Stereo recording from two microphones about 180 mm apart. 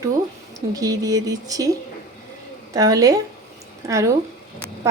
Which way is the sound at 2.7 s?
20° right (ahead or behind).